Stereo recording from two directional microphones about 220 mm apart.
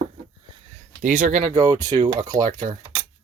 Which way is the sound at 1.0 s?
35° right (ahead or behind).